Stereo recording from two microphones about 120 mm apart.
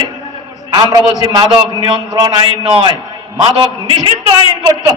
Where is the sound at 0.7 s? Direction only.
35° right (ahead or behind).